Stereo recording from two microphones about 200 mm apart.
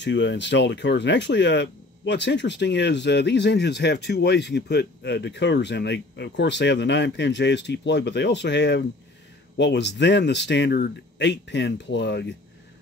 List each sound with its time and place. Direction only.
0.0 s speech: 60° left (ahead or behind)